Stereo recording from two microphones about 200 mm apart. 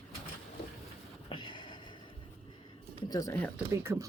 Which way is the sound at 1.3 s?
25° left (ahead or behind).